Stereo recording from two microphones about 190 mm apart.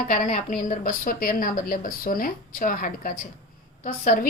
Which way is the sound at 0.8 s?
45° left (ahead or behind).